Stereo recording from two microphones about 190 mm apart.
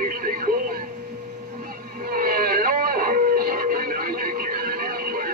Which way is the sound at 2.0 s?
50° right (ahead or behind).